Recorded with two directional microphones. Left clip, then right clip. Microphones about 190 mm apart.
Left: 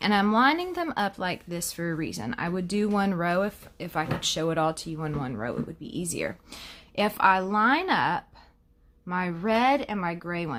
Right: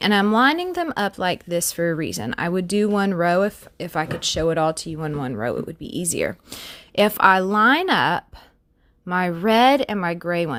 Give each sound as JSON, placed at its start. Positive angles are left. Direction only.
{"t": 0.0, "sound": "speech", "side_deg": -35}